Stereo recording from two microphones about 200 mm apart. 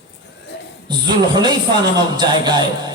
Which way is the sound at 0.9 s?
20° right (ahead or behind).